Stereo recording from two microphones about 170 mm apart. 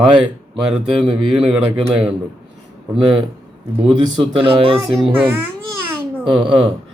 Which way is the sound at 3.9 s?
30° right (ahead or behind).